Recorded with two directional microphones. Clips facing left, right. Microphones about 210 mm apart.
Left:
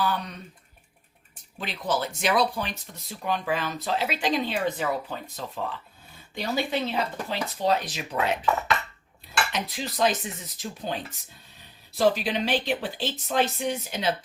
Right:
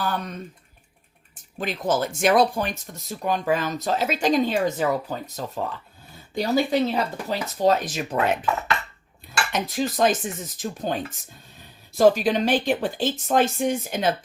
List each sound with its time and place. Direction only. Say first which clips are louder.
0.0 s speech: even; 45° right (ahead or behind)
1.5 s speech: right 5 dB; 45° right (ahead or behind)
9.5 s speech: right 6 dB; 45° right (ahead or behind)